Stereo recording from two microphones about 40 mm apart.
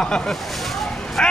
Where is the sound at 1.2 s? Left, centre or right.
Centre.